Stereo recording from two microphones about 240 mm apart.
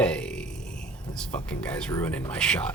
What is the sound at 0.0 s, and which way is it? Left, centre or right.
Music, centre.